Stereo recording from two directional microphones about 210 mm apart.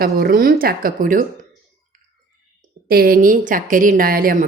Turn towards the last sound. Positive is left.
turn(degrees=-45)  # may be behind; listen again after turning